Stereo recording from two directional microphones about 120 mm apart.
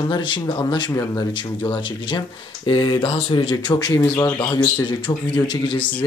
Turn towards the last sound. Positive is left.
turn(degrees=40)  # may be behind; listen again after turning